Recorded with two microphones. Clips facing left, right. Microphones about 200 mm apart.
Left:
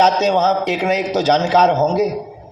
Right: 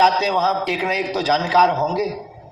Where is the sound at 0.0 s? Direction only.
45° left (ahead or behind).